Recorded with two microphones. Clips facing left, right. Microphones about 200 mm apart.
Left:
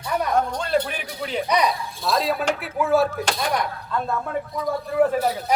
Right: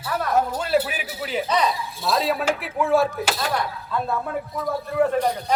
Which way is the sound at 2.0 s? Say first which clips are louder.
Even; centre (ahead or behind).